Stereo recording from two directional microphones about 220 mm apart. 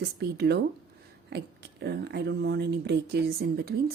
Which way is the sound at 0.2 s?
50° right (ahead or behind).